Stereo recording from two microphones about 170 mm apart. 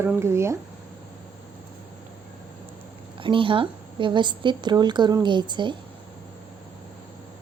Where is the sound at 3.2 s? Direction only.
30° right (ahead or behind).